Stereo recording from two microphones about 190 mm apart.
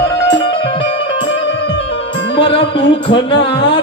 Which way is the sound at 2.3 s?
25° left (ahead or behind).